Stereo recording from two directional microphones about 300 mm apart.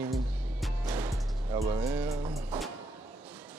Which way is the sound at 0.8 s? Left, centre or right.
Centre.